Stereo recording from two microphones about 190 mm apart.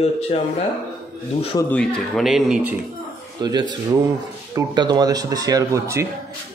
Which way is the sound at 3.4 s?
20° right (ahead or behind).